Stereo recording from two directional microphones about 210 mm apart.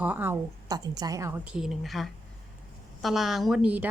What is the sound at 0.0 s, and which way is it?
A woman's voice, 10° right (ahead or behind).